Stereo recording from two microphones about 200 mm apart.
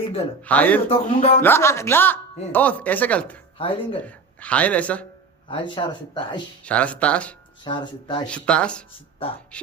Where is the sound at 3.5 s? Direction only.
25° left (ahead or behind).